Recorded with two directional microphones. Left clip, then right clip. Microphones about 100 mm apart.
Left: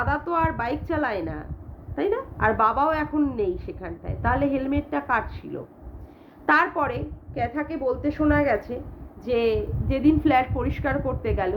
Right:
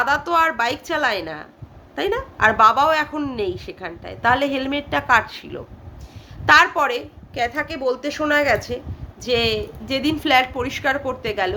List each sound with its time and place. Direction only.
0.0 s a woman's voice: 30° right (ahead or behind)
6.4 s a woman's voice: 15° right (ahead or behind)